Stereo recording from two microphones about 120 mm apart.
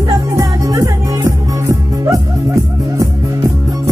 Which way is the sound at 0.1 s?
30° right (ahead or behind).